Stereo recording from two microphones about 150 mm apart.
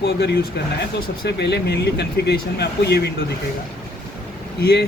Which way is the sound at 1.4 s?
90° left.